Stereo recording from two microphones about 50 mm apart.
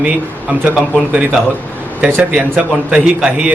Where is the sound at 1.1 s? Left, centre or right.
Right.